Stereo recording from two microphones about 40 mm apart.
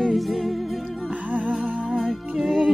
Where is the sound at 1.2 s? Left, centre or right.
Right.